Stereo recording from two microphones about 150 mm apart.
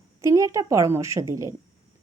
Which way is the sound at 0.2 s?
20° right (ahead or behind).